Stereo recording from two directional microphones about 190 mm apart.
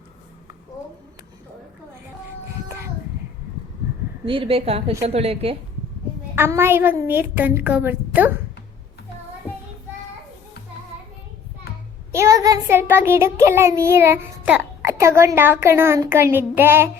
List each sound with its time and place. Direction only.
2.6 s a sound: 15° right (ahead or behind)
4.3 s a woman's voice: 30° right (ahead or behind)
6.3 s a woman's voice: 10° right (ahead or behind)
12.1 s a child's voice: 15° right (ahead or behind)